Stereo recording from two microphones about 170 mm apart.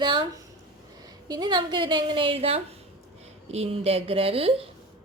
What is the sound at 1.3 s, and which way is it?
A woman's voice, 25° right (ahead or behind).